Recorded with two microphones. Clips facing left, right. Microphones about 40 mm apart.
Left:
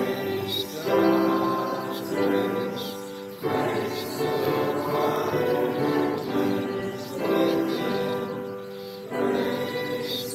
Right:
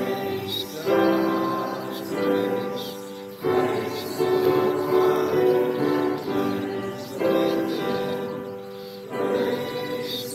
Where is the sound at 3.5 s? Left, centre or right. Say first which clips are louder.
Right 3 dB; right.